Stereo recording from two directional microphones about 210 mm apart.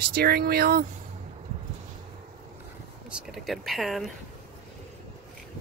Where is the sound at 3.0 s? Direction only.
5° right (ahead or behind).